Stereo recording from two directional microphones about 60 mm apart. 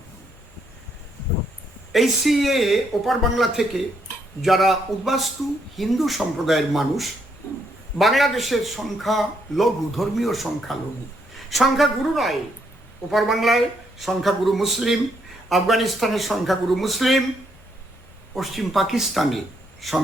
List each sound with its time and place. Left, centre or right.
1.9 s a man's voice: centre
7.4 s a sound: left
7.9 s a man's voice: centre
18.3 s a man's voice: centre